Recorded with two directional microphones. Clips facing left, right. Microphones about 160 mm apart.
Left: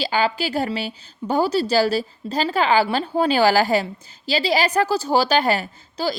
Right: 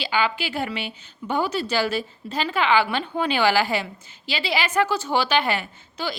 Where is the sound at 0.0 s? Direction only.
40° left (ahead or behind).